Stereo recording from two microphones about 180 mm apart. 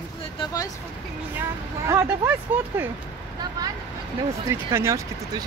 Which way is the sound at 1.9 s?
15° right (ahead or behind).